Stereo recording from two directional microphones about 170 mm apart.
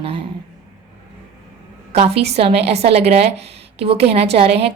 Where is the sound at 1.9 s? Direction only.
35° right (ahead or behind).